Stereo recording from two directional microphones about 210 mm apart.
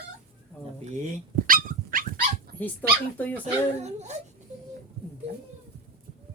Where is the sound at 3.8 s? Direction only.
35° right (ahead or behind).